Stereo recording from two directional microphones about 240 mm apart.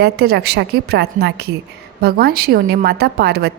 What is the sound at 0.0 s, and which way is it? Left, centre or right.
A woman's voice, right.